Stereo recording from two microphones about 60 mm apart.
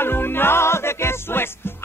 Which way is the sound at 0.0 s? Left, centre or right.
Left.